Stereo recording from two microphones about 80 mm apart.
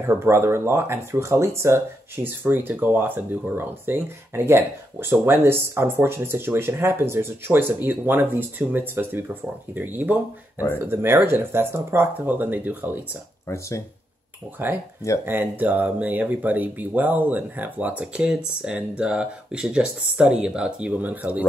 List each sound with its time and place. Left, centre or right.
0.0 s speech: right
2.2 s speech: right
13.5 s speech: left
14.6 s speech: right